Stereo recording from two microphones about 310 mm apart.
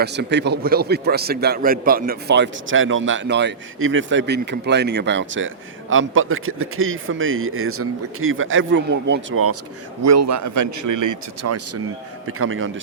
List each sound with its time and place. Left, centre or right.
0.0 s a man's voice: right
10.0 s a man's voice: right
11.4 s a man's voice: right